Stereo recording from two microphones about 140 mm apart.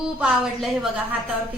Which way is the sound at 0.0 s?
5° right (ahead or behind).